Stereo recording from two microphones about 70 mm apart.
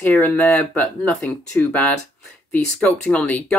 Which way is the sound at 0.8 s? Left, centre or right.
Left.